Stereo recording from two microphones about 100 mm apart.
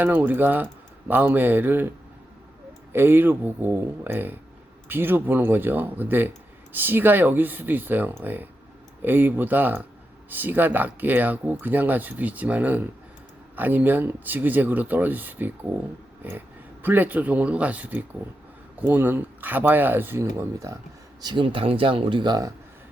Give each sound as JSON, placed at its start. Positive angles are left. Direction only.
{"t": 0.0, "sound": "speech", "side_deg": -20}
{"t": 2.9, "sound": "speech", "side_deg": -20}
{"t": 21.2, "sound": "a man's voice", "side_deg": -50}